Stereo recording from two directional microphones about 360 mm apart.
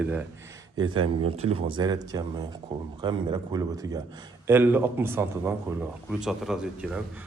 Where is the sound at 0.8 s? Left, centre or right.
Right.